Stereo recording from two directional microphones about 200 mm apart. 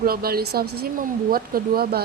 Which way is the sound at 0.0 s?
50° right (ahead or behind).